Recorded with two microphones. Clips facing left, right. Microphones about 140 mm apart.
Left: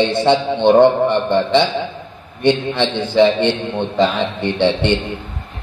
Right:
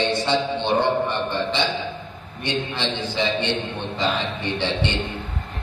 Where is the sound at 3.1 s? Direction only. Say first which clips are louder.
Left 12 dB; 60° left (ahead or behind).